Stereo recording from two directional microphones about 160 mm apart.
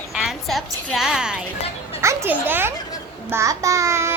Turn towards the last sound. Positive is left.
turn(degrees=-15)  # may be behind; listen again after turning